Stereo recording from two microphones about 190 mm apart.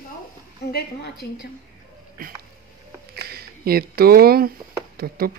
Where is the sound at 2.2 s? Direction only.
50° right (ahead or behind).